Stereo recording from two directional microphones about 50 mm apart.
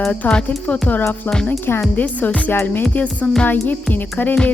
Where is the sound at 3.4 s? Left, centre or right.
Left.